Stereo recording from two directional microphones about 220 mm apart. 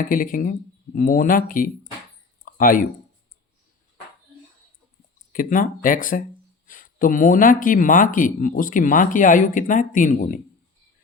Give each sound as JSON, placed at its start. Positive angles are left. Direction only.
{"t": 0.0, "sound": "speech", "side_deg": 40}
{"t": 2.4, "sound": "a sound", "side_deg": 40}
{"t": 5.3, "sound": "speech", "side_deg": 40}